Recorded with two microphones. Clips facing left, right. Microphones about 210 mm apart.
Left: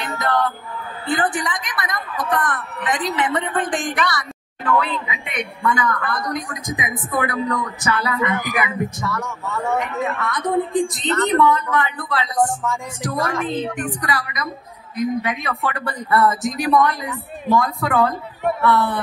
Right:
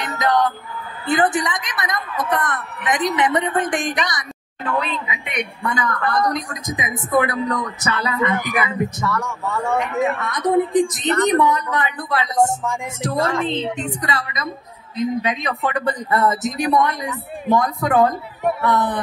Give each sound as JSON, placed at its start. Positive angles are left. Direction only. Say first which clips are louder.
{"t": 0.0, "sound": "music", "louder": "right 2 dB", "side_deg": -20}
{"t": 1.0, "sound": "a sound", "louder": "right 3 dB", "side_deg": -20}
{"t": 5.7, "sound": "a woman's voice", "louder": "left 4 dB", "side_deg": -25}
{"t": 5.9, "sound": "speech", "louder": "right 5 dB", "side_deg": -40}
{"t": 6.7, "sound": "a woman's voice", "louder": "right 5 dB", "side_deg": -25}
{"t": 9.8, "sound": "a woman's voice", "louder": "right 3 dB", "side_deg": -20}